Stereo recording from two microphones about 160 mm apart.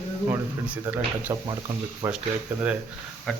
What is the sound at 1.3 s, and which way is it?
Speech, 25° right (ahead or behind).